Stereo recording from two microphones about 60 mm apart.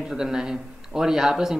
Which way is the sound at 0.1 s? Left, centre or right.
Centre.